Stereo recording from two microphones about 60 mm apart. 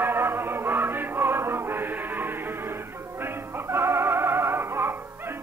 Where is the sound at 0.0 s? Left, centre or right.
Right.